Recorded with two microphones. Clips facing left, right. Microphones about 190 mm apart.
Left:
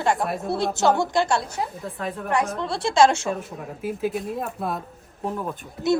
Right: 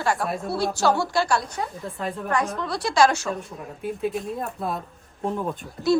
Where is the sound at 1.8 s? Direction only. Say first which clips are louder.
Even; 5° left (ahead or behind).